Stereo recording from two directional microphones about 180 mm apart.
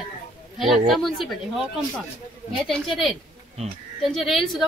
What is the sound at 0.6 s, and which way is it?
Speech, centre (ahead or behind).